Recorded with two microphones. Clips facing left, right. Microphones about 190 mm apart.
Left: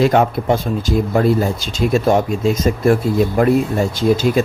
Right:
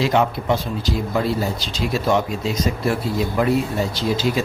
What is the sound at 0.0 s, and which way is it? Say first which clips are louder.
A man's voice: left 5 dB; 50° left (ahead or behind).